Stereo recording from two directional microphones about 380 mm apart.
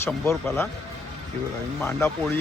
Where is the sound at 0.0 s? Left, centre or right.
Centre.